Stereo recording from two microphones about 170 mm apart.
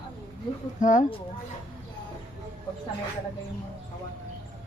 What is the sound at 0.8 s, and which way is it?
Speech, 50° left (ahead or behind).